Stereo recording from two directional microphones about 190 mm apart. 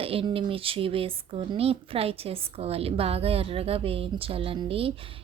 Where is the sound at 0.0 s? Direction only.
30° right (ahead or behind).